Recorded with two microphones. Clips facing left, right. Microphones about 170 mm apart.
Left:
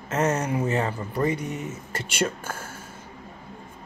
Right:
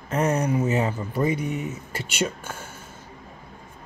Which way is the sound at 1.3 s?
40° left (ahead or behind).